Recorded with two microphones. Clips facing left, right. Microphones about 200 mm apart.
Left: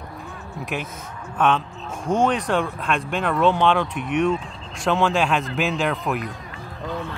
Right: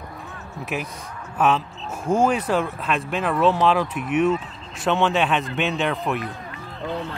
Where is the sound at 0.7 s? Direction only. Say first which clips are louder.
Right 1 dB; 5° right (ahead or behind).